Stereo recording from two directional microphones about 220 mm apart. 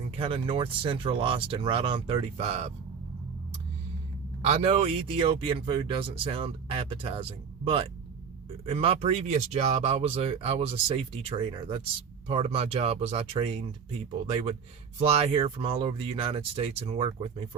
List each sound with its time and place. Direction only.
0.2 s speech: 25° right (ahead or behind)
4.4 s speech: 30° right (ahead or behind)
14.9 s speech: 30° right (ahead or behind)